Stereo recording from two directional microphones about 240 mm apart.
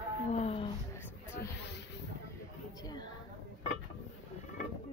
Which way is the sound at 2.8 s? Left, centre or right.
Centre.